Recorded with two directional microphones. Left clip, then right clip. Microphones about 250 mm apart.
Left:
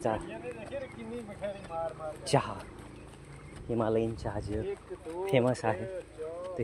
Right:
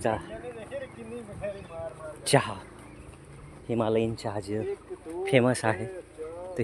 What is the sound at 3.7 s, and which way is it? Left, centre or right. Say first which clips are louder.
Speech: right 3 dB; right.